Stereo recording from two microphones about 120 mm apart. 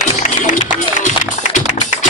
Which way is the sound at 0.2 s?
90° left.